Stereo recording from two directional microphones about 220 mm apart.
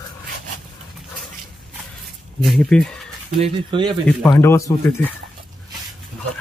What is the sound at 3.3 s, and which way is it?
Speech, 25° right (ahead or behind).